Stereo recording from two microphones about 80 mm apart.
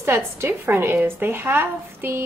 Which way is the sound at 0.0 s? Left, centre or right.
Right.